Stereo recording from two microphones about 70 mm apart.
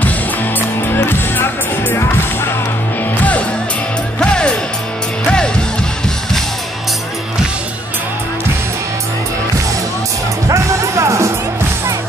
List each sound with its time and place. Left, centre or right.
0.9 s music: left
4.2 s music: centre
10.5 s music: right